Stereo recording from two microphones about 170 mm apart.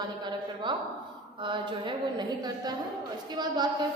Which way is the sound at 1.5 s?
25° right (ahead or behind).